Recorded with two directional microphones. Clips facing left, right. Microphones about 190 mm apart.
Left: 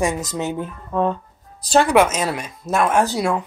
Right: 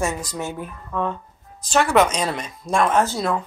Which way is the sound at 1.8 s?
10° left (ahead or behind).